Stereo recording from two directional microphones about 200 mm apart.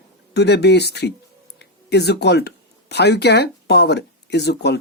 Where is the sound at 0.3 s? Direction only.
55° left (ahead or behind).